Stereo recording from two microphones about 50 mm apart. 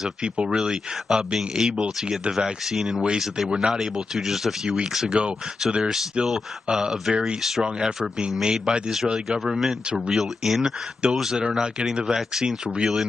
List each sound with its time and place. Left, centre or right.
0.2 s speech: centre
12.6 s speech: centre